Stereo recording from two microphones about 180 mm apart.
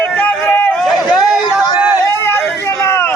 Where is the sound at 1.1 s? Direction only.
Centre (ahead or behind).